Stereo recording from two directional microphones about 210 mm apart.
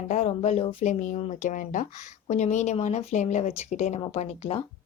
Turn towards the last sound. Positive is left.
turn(degrees=30)  # may be behind; listen again after turning